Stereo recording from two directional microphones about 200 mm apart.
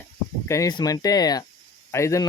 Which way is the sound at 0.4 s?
15° left (ahead or behind).